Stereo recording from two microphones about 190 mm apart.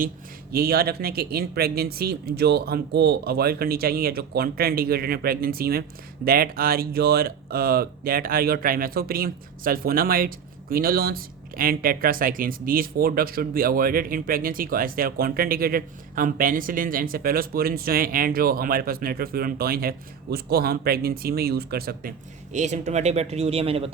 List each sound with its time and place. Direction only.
0.5 s speech: 55° right (ahead or behind)
22.5 s speech: 40° right (ahead or behind)